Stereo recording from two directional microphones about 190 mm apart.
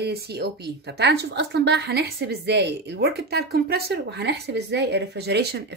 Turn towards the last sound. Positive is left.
turn(degrees=-60)  # may be behind; listen again after turning